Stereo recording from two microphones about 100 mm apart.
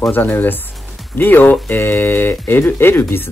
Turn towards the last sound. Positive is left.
turn(degrees=20)  # may be behind; listen again after turning